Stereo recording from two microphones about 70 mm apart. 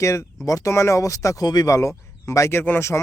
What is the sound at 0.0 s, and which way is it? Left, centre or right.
Speech, left.